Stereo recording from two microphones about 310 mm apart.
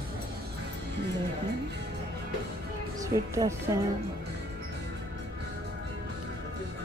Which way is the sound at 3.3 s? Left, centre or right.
Centre.